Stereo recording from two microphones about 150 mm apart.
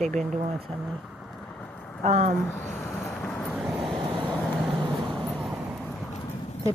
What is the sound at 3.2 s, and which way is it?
Vehicle, 10° left (ahead or behind).